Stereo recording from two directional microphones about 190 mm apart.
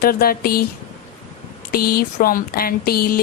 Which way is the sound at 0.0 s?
50° left (ahead or behind).